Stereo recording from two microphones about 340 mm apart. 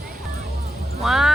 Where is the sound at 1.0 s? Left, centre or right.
Centre.